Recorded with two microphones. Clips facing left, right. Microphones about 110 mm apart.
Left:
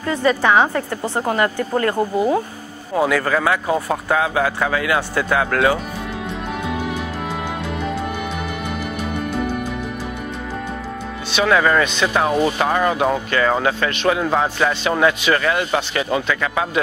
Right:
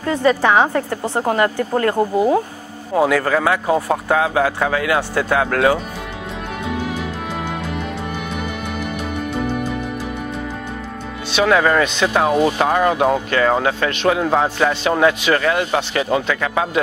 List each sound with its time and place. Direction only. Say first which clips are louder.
0.1 s speech: right 1 dB; 45° right (ahead or behind)
3.1 s speech: right 1 dB; 45° right (ahead or behind)
3.6 s speech: right 2 dB; 30° right (ahead or behind)
11.3 s speech: right 1 dB; 35° right (ahead or behind)
12.3 s speech: right 2 dB; 15° right (ahead or behind)
12.5 s speech: right 2 dB; 35° right (ahead or behind)
14.8 s speech: right 2 dB; 45° right (ahead or behind)
16.1 s speech: right 2 dB; 40° right (ahead or behind)